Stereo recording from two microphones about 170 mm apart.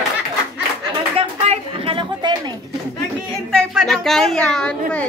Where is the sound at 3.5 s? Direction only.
5° left (ahead or behind).